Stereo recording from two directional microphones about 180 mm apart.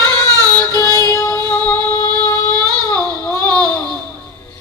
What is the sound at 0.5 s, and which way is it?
Child singing, 20° left (ahead or behind).